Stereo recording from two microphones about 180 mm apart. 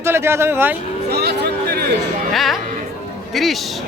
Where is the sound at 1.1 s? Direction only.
65° right (ahead or behind).